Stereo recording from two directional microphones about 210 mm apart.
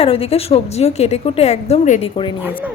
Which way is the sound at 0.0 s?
30° left (ahead or behind).